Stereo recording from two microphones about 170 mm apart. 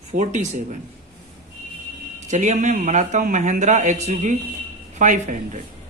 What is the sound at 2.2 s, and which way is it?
A man's voice, 45° right (ahead or behind).